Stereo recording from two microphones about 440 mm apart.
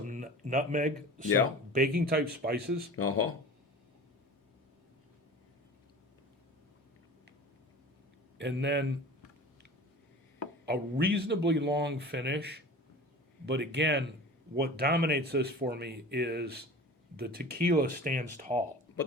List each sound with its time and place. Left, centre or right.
0.0 s a sound: centre
1.7 s speech: centre
2.9 s speech: left
8.4 s speech: right
10.7 s speech: right